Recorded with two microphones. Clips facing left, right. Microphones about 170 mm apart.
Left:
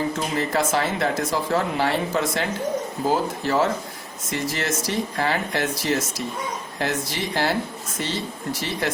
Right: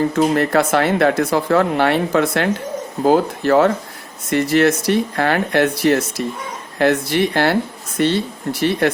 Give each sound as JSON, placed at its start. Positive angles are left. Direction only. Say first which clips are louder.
{"t": 0.2, "sound": "speech", "louder": "right 8 dB", "side_deg": -65}